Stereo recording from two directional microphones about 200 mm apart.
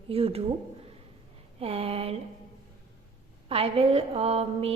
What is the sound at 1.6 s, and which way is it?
Speech, 30° right (ahead or behind).